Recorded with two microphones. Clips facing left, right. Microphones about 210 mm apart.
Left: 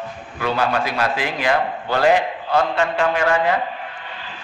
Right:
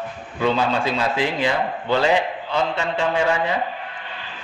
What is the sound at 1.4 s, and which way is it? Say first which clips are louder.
Speech: left 1 dB; 55° left (ahead or behind).